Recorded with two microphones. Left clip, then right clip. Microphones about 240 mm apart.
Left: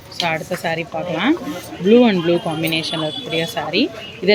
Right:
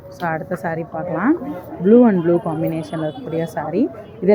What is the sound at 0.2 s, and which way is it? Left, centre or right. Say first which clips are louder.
Speech: left 2 dB; centre.